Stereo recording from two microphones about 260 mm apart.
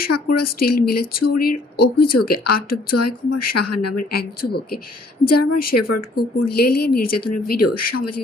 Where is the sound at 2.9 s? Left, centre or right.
Left.